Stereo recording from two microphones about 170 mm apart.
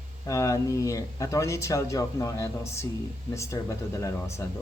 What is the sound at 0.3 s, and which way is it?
Speech, 20° left (ahead or behind).